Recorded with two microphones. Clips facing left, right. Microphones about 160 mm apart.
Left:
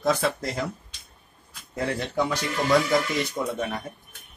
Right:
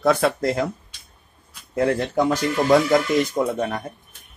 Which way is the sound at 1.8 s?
45° right (ahead or behind).